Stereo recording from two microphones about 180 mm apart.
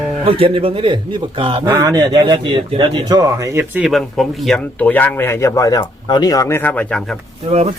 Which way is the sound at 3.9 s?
Centre (ahead or behind).